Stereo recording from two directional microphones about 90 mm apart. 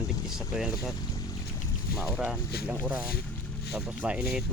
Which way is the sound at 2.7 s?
20° right (ahead or behind).